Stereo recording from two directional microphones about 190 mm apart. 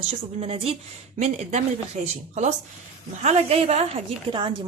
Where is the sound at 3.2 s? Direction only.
35° right (ahead or behind).